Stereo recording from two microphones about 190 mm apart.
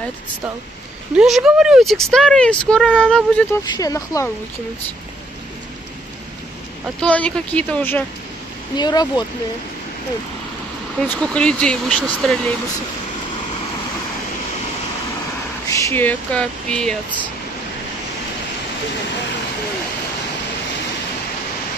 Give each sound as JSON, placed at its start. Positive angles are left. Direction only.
{"t": 1.1, "sound": "speech", "side_deg": -5}
{"t": 3.6, "sound": "speech", "side_deg": 20}
{"t": 7.0, "sound": "speech", "side_deg": 5}
{"t": 8.7, "sound": "speech", "side_deg": 20}
{"t": 11.0, "sound": "speech", "side_deg": 5}
{"t": 15.7, "sound": "speech", "side_deg": 10}